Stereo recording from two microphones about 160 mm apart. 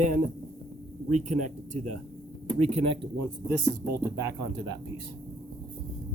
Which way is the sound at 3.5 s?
20° right (ahead or behind).